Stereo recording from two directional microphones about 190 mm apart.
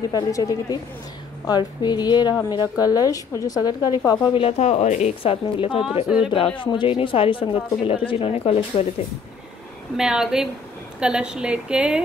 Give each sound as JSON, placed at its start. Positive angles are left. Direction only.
{"t": 0.1, "sound": "speech", "side_deg": 20}
{"t": 6.0, "sound": "a woman's voice", "side_deg": -5}
{"t": 6.3, "sound": "speech", "side_deg": 25}
{"t": 9.9, "sound": "a woman's voice", "side_deg": -5}